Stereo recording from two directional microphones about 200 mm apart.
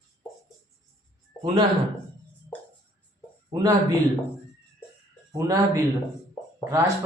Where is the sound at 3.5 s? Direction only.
20° right (ahead or behind).